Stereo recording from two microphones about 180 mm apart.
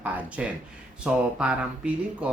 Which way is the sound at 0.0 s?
5° right (ahead or behind).